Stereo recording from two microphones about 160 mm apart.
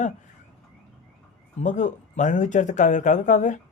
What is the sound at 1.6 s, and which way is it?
Speech, 50° left (ahead or behind).